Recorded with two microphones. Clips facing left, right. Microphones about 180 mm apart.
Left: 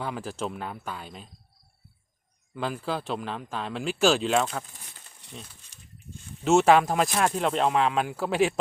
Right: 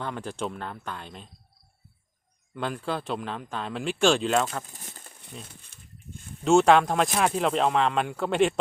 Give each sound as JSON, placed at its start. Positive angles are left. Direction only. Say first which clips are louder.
{"t": 0.0, "sound": "speech", "louder": "even", "side_deg": 5}
{"t": 2.6, "sound": "speech", "louder": "even", "side_deg": 0}
{"t": 4.9, "sound": "a sound", "louder": "right 6 dB", "side_deg": -45}
{"t": 6.4, "sound": "speech", "louder": "right 1 dB", "side_deg": 5}